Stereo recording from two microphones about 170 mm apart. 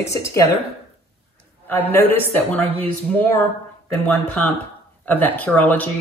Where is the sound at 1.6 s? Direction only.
10° left (ahead or behind).